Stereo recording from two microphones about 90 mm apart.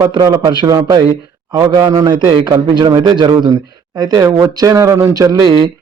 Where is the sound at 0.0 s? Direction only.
45° right (ahead or behind).